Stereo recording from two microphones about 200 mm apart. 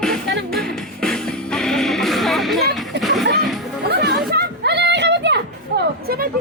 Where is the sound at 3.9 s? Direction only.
55° right (ahead or behind).